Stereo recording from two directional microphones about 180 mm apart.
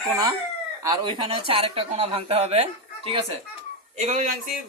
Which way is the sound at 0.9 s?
25° right (ahead or behind).